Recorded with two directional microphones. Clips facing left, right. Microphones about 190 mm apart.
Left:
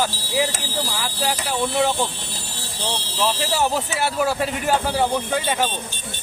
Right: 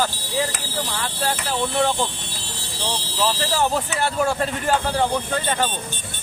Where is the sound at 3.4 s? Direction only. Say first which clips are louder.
Even; 10° left (ahead or behind).